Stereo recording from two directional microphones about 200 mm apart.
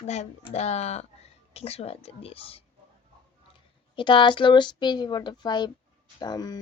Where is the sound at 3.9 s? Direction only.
25° left (ahead or behind).